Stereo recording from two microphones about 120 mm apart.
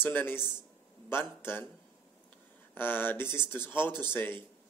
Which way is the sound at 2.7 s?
20° left (ahead or behind).